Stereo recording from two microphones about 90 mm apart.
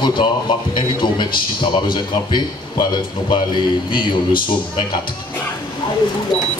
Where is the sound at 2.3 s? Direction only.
55° left (ahead or behind).